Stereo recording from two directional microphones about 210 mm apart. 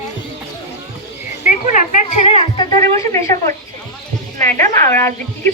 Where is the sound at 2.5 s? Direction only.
15° left (ahead or behind).